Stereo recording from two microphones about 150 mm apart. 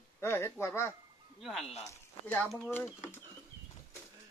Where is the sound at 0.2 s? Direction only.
15° left (ahead or behind).